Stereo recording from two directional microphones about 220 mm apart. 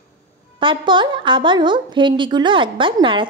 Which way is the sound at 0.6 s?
20° right (ahead or behind).